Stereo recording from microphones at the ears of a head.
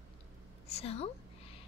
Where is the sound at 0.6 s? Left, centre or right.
Left.